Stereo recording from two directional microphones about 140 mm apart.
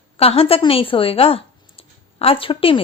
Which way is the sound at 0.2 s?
45° left (ahead or behind).